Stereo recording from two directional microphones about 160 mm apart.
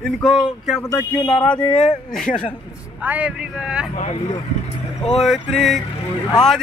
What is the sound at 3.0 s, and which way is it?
Speech, 10° right (ahead or behind).